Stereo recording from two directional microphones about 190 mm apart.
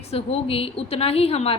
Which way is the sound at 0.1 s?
30° left (ahead or behind).